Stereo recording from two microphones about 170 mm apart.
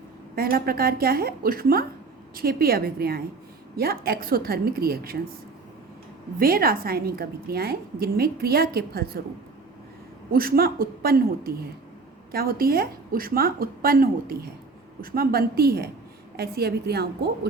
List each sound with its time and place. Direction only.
0.3 s a woman's voice: 60° right (ahead or behind)
6.4 s a woman's voice: 60° right (ahead or behind)
10.3 s a woman's voice: 60° right (ahead or behind)